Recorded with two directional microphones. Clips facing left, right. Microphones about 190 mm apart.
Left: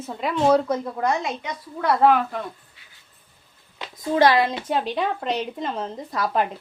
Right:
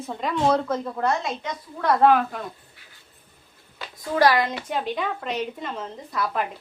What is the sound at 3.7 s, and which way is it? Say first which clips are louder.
A woman's voice: left 2 dB; 25° left (ahead or behind).